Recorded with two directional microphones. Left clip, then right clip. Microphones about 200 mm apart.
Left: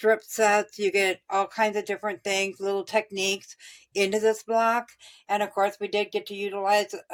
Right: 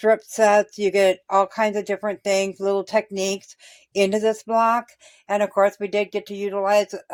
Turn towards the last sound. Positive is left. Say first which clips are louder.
# right 4 dB
turn(degrees=-35)  # may be behind; listen again after turning